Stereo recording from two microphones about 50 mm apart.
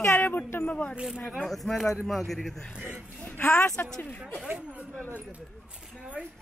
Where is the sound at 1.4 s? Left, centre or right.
Centre.